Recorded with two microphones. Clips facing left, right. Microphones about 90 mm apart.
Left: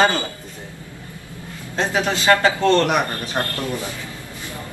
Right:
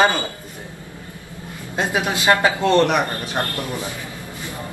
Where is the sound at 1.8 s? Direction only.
15° right (ahead or behind).